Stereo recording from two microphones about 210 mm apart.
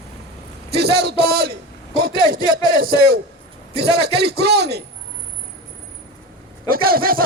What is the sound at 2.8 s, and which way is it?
Speech, 45° right (ahead or behind).